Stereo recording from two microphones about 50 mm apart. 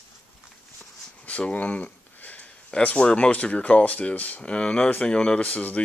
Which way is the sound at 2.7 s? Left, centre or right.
Left.